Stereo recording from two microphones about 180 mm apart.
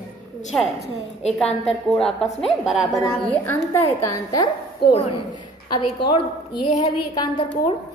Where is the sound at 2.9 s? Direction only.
15° left (ahead or behind).